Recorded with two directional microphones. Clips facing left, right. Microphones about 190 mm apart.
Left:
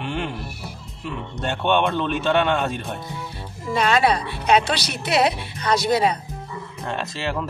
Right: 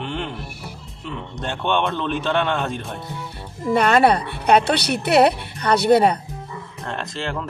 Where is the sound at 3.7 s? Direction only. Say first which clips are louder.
Right 3 dB; 55° right (ahead or behind).